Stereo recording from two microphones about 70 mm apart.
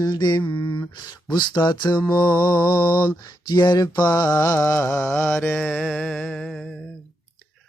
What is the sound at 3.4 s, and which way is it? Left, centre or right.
Mantra, left.